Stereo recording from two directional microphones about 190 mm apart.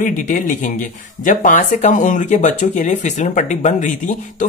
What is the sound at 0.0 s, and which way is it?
Speech, 40° left (ahead or behind).